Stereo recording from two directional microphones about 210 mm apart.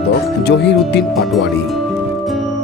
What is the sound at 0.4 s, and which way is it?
Speech, 50° left (ahead or behind).